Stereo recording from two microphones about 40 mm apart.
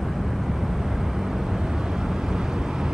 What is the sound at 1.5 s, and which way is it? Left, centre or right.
Vehicle, centre.